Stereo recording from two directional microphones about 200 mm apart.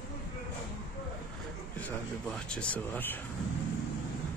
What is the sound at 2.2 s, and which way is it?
Speech, 5° left (ahead or behind).